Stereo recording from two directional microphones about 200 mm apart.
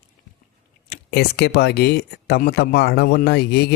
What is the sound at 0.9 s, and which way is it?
Speech, 55° left (ahead or behind).